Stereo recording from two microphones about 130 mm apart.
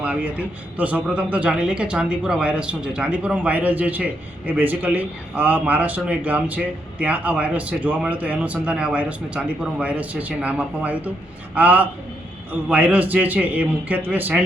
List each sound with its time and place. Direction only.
0.0 s a man's voice: 10° right (ahead or behind)